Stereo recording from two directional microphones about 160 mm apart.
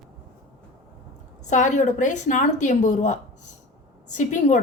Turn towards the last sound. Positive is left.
turn(degrees=50)  # may be behind; listen again after turning